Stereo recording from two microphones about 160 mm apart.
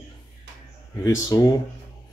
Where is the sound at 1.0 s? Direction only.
25° left (ahead or behind).